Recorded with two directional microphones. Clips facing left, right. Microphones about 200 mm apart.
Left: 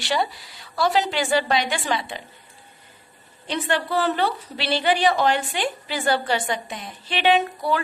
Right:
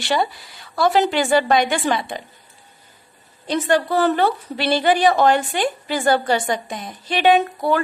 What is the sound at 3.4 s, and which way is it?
A woman's voice, 40° right (ahead or behind).